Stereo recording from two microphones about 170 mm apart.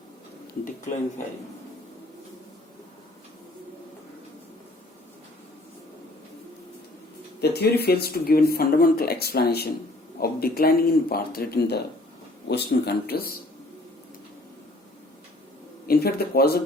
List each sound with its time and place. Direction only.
7.4 s speech: 70° left (ahead or behind)
12.5 s speech: 80° left; by 13.4 s 65° left (ahead or behind)
15.9 s speech: 65° left (ahead or behind)